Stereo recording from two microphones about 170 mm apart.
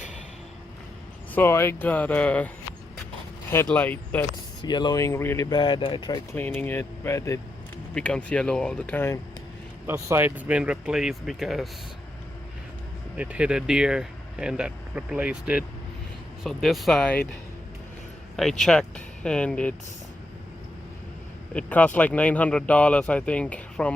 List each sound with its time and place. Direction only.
1.3 s speech: 15° left (ahead or behind)
3.5 s speech: 10° left (ahead or behind)
4.6 s speech: 25° left (ahead or behind)
6.3 s speech: 10° left (ahead or behind)
7.9 s speech: 5° left (ahead or behind)
9.8 s speech: 15° right (ahead or behind)
13.1 s speech: 10° right (ahead or behind)
18.3 s speech: centre (ahead or behind)
21.5 s speech: 10° left (ahead or behind)